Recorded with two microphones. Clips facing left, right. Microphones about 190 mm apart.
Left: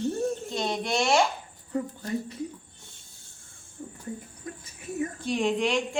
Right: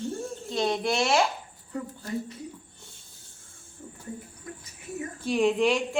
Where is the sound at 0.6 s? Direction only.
Centre (ahead or behind).